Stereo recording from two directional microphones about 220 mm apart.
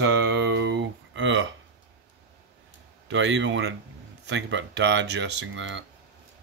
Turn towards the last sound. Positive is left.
turn(degrees=-55)  # may be behind; listen again after turning